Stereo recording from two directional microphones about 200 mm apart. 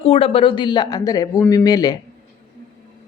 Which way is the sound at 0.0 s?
30° left (ahead or behind).